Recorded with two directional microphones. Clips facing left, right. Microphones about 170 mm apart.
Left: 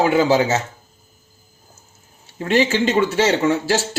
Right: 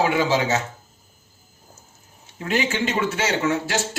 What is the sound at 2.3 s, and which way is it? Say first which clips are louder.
Speech: left 6 dB; 35° left (ahead or behind).